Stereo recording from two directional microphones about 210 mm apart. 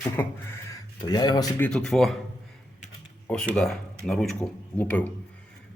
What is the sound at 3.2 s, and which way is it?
Speech, 5° left (ahead or behind).